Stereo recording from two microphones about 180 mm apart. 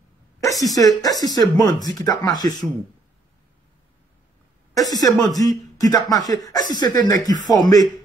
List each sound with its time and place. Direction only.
0.5 s a sound: centre (ahead or behind)
0.7 s speech: 20° left (ahead or behind)
4.7 s speech: 20° left (ahead or behind)